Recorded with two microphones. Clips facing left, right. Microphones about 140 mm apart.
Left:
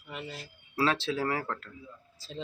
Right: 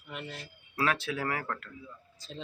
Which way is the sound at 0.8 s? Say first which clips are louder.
Left 2 dB; 30° left (ahead or behind).